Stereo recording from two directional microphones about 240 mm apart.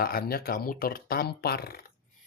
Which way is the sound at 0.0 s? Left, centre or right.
Left.